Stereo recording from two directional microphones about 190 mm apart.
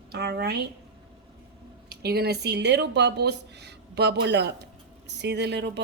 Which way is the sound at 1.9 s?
55° right (ahead or behind).